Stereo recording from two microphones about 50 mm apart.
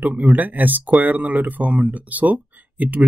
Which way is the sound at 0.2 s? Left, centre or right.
Right.